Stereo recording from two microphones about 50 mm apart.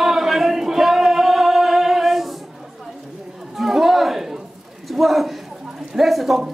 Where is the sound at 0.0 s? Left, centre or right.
Centre.